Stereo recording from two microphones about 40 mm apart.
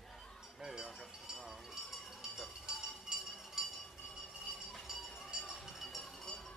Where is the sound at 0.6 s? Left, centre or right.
Centre.